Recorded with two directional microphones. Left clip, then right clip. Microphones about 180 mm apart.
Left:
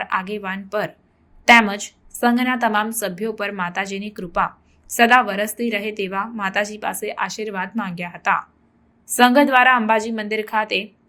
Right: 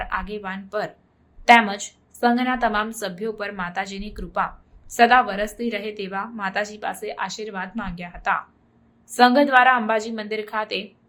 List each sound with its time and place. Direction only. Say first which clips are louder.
0.0 s a woman's voice: left 4 dB; 15° left (ahead or behind)